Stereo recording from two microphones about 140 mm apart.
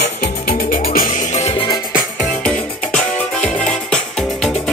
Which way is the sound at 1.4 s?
45° left (ahead or behind).